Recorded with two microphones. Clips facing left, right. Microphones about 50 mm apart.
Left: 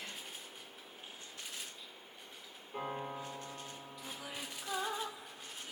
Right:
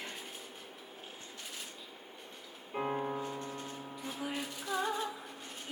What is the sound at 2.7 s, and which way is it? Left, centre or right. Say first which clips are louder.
Music: right 6 dB; right.